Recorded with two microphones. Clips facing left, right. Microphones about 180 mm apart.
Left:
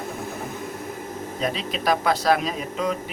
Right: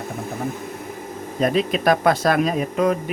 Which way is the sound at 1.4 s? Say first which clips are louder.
Right 8 dB; 50° right (ahead or behind).